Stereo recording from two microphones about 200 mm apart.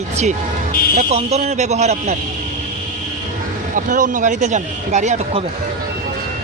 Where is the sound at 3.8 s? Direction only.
40° right (ahead or behind).